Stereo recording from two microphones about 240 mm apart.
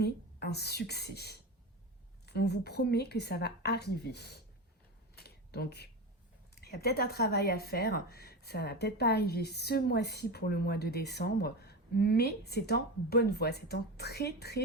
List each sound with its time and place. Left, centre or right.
0.0 s a woman's voice: left
5.1 s a sound: left
6.6 s speech: left